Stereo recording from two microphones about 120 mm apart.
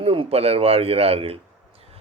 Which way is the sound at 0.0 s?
50° right (ahead or behind).